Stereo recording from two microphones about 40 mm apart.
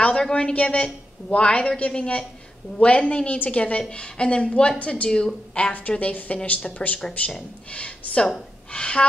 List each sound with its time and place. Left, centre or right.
0.0 s a woman's voice: left
3.9 s a woman's voice: left
5.7 s a woman's voice: left
6.8 s a woman's voice: left
7.2 s a woman's voice: left
7.7 s a woman's voice: left